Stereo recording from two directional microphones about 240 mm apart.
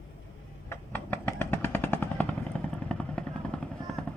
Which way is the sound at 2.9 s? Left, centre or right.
Centre.